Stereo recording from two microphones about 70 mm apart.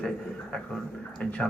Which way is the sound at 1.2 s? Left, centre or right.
Centre.